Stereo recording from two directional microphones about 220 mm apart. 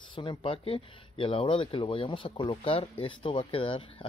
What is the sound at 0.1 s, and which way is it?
Speech, 20° left (ahead or behind).